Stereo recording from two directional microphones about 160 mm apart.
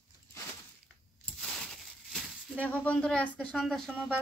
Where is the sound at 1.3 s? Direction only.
5° left (ahead or behind).